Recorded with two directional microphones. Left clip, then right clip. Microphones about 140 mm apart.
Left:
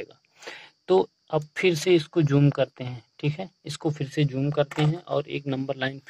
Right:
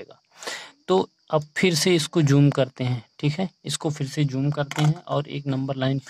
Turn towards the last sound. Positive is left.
turn(degrees=-20)  # may be behind; listen again after turning